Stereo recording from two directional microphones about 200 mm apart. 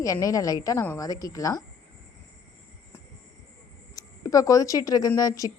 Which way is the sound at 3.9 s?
15° left (ahead or behind).